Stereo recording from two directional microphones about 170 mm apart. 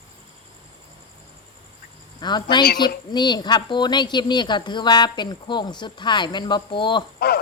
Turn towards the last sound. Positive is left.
turn(degrees=65)  # may be behind; listen again after turning